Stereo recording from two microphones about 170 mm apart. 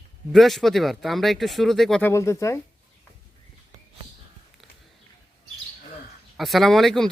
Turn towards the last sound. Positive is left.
turn(degrees=0)  # may be behind; listen again after turning